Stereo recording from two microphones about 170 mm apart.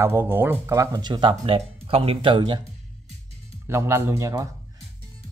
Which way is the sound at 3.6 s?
15° right (ahead or behind).